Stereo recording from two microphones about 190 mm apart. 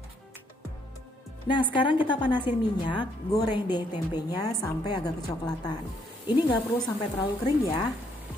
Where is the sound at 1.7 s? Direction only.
25° left (ahead or behind).